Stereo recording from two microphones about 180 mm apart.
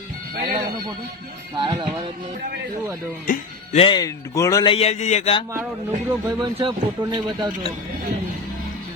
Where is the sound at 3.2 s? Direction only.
50° left (ahead or behind).